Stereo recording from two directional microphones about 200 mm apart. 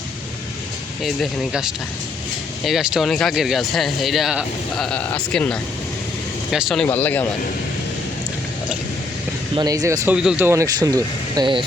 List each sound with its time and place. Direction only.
1.0 s speech: centre (ahead or behind)
6.8 s speech: 10° left (ahead or behind)
9.6 s speech: 20° right (ahead or behind)